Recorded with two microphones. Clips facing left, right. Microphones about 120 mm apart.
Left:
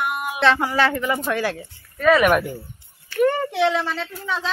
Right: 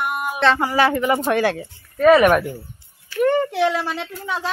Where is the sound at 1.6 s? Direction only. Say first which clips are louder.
Right 8 dB; 40° right (ahead or behind).